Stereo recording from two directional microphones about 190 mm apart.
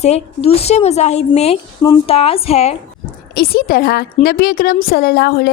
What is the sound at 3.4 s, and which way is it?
Speech, 50° left (ahead or behind).